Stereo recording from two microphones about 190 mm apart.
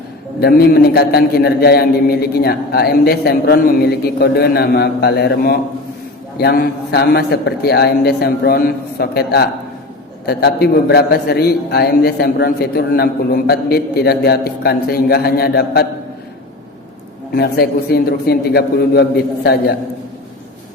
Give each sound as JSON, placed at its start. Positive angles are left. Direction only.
{"t": 0.3, "sound": "a man's voice", "side_deg": 55}
{"t": 17.3, "sound": "a man's voice", "side_deg": 55}